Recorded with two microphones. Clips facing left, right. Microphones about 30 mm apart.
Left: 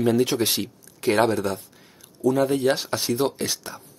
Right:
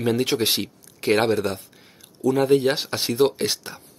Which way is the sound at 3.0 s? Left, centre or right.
Right.